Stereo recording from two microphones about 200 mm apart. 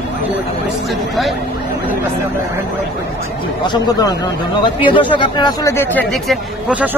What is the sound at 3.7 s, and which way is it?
Speech, 20° left (ahead or behind).